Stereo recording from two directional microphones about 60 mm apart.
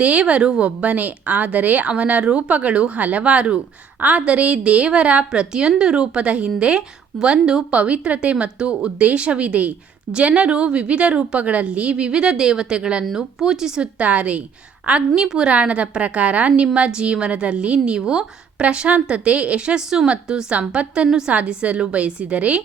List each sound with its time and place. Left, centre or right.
0.0 s a woman's voice: right
14.0 s a woman's voice: right